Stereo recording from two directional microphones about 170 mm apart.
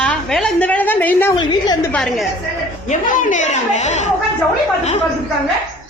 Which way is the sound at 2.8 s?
50° left (ahead or behind).